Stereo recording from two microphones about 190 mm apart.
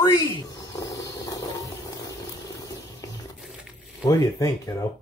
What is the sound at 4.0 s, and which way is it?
Speech, 15° left (ahead or behind).